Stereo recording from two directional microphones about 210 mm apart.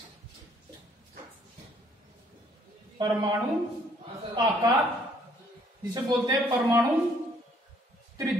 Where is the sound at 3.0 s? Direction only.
20° right (ahead or behind).